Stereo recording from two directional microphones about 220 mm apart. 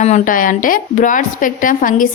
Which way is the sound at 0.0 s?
35° left (ahead or behind).